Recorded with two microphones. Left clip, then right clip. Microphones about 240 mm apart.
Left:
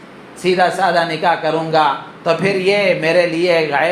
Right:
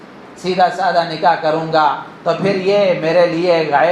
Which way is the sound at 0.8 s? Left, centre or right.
Left.